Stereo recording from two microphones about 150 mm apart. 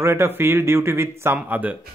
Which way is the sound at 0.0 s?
15° right (ahead or behind).